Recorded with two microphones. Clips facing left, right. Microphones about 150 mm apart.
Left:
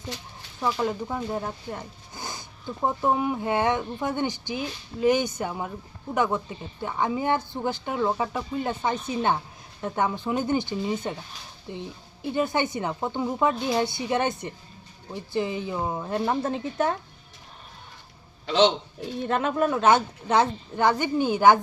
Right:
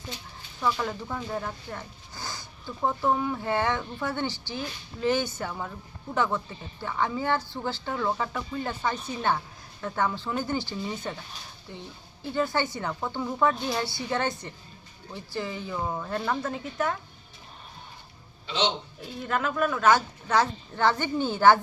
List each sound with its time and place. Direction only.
0.6 s a woman's voice: 20° left (ahead or behind)
19.2 s a woman's voice: 25° left (ahead or behind)